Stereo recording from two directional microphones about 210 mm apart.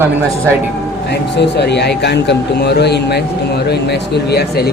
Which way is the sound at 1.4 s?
55° left (ahead or behind).